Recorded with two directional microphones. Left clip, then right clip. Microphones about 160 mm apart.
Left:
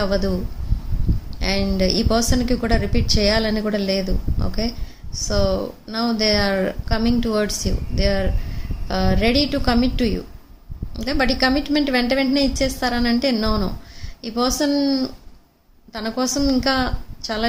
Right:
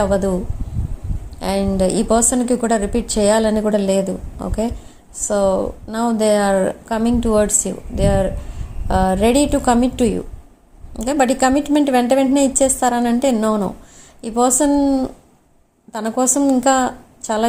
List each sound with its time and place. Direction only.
1.4 s a woman's voice: 20° right (ahead or behind)